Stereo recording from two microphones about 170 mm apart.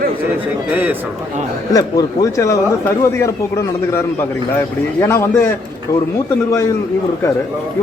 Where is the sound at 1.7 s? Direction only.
20° left (ahead or behind).